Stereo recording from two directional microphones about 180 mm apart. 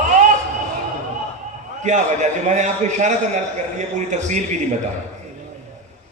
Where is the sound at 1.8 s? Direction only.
40° right (ahead or behind).